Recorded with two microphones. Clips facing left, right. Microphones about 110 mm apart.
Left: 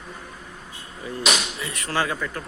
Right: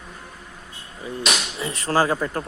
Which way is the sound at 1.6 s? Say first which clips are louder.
Right 5 dB; 30° right (ahead or behind).